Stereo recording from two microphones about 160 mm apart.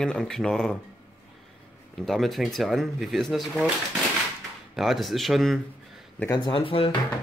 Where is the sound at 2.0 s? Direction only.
Centre (ahead or behind).